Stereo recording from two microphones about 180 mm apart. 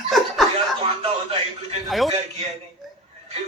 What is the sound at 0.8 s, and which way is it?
Speech, 35° right (ahead or behind).